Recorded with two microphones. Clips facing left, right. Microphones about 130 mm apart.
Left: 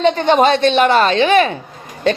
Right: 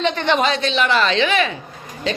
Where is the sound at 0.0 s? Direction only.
40° left (ahead or behind).